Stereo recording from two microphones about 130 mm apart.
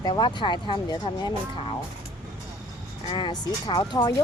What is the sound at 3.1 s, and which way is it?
Speech, 40° left (ahead or behind).